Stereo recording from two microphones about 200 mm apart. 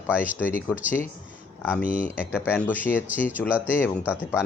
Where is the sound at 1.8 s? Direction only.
40° left (ahead or behind).